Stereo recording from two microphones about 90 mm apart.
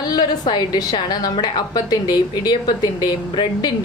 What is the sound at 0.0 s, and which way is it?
A woman's voice, 50° left (ahead or behind).